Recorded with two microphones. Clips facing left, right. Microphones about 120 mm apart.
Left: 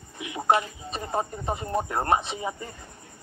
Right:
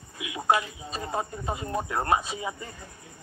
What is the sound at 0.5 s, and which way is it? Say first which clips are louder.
Speech: left 2 dB; 25° left (ahead or behind).